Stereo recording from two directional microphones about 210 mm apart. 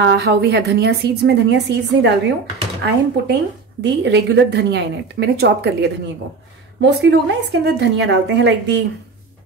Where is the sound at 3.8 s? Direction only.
55° right (ahead or behind).